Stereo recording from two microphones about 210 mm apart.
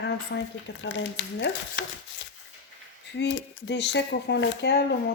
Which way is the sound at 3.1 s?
55° left (ahead or behind).